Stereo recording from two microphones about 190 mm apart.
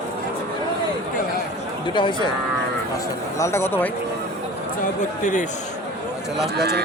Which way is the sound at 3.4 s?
15° left (ahead or behind).